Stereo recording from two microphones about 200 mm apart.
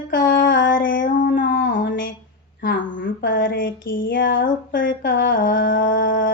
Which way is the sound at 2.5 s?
45° left (ahead or behind).